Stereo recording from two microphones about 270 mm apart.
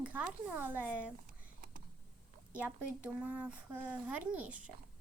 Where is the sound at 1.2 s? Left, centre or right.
Right.